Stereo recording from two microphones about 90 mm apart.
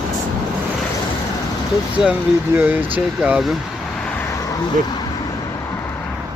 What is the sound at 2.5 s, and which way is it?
Speech, 20° right (ahead or behind).